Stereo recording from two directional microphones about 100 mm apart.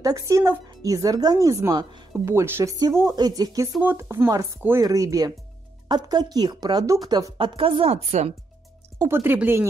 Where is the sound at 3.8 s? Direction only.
25° right (ahead or behind); by 7.3 s 40° right (ahead or behind).